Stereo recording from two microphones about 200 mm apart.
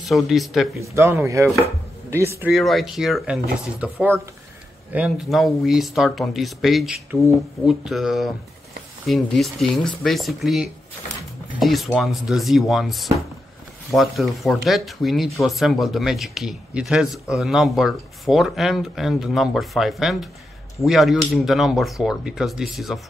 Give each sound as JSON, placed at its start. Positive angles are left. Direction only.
{"t": 0.0, "sound": "speech", "side_deg": 0}
{"t": 0.7, "sound": "speech", "side_deg": -15}
{"t": 2.5, "sound": "speech", "side_deg": 0}